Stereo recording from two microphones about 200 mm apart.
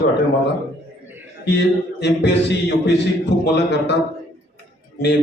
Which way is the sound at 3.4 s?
60° left (ahead or behind).